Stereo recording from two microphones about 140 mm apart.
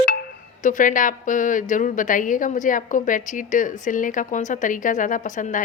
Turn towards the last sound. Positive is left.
turn(degrees=70)  # may be behind; listen again after turning